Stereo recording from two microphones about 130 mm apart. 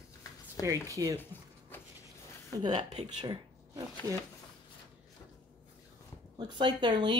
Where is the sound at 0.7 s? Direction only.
25° right (ahead or behind).